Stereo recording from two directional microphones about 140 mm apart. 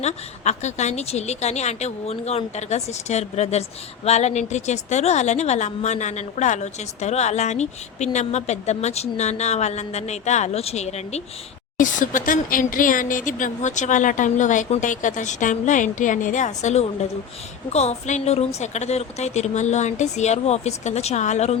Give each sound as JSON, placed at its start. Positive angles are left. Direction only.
{"t": 0.0, "sound": "a woman's voice", "side_deg": 55}
{"t": 11.8, "sound": "a woman's voice", "side_deg": 70}